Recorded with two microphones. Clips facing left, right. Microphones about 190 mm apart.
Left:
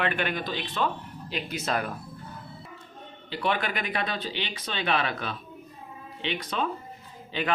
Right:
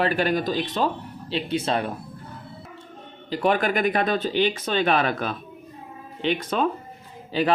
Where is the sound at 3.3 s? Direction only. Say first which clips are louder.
Right 7 dB; 45° right (ahead or behind).